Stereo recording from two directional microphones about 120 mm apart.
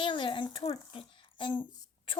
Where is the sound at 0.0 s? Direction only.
45° left (ahead or behind).